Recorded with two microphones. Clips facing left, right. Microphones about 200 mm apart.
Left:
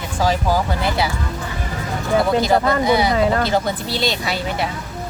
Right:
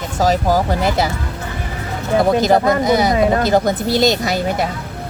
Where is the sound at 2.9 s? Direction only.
45° right (ahead or behind).